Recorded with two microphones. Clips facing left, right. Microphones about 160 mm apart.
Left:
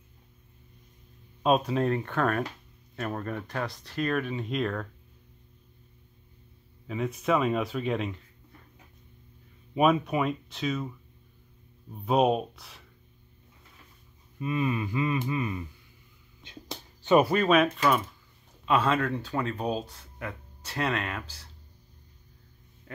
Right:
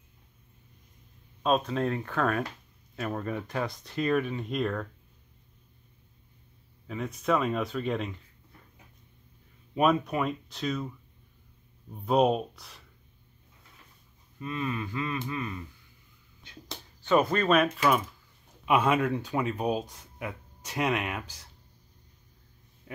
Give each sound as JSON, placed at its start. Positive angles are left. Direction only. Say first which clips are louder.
{"t": 1.4, "sound": "speech", "louder": "left 2 dB", "side_deg": 10}
{"t": 3.4, "sound": "speech", "louder": "right 1 dB", "side_deg": -15}
{"t": 4.3, "sound": "speech", "louder": "even", "side_deg": 0}
{"t": 6.9, "sound": "speech", "louder": "left 1 dB", "side_deg": 5}
{"t": 9.8, "sound": "speech", "louder": "left 1 dB", "side_deg": 5}
{"t": 12.1, "sound": "speech", "louder": "even", "side_deg": 5}
{"t": 14.4, "sound": "a sound", "louder": "left 4 dB", "side_deg": 15}
{"t": 17.0, "sound": "speech", "louder": "left 3 dB", "side_deg": 15}
{"t": 18.7, "sound": "speech", "louder": "right 1 dB", "side_deg": -15}
{"t": 22.9, "sound": "a sound", "louder": "right 1 dB", "side_deg": -10}